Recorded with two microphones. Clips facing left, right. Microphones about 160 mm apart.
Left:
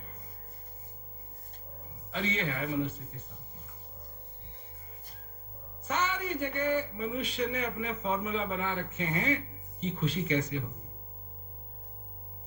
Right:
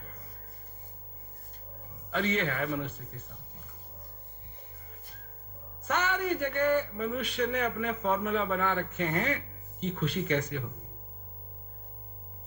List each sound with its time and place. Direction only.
2.1 s a man's voice: 55° right (ahead or behind)
5.8 s a man's voice: 65° right (ahead or behind)